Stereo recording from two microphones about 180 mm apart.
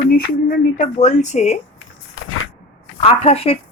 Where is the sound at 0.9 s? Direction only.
40° left (ahead or behind).